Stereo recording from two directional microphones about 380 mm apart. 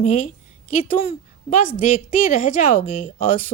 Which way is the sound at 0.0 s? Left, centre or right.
Centre.